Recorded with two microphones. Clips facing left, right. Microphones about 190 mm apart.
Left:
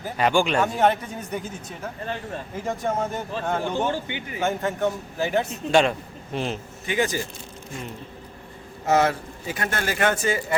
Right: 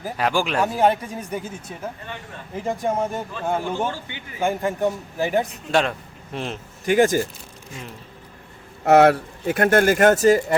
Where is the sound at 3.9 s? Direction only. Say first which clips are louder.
Left 3 dB; 15° left (ahead or behind).